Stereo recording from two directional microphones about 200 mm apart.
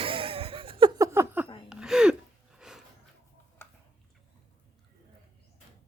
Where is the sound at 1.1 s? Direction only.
15° right (ahead or behind).